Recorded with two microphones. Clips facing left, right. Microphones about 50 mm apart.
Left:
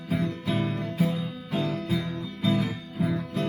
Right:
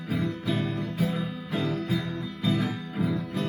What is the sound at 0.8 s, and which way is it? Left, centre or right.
Music, left.